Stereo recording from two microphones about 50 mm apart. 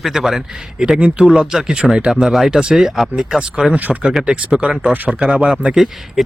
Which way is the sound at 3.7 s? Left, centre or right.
Right.